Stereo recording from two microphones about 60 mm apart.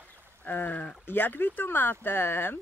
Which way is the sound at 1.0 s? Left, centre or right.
Left.